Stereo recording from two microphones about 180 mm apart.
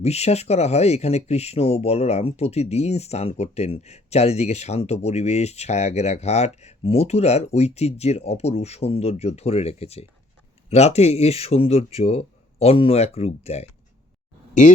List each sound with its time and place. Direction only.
0.0 s speech: 35° left (ahead or behind)